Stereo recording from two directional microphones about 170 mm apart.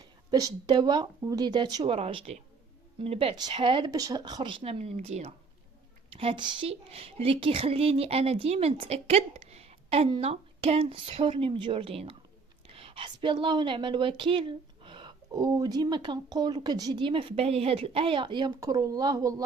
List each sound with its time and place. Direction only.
0.0 s a woman's voice: 20° right (ahead or behind)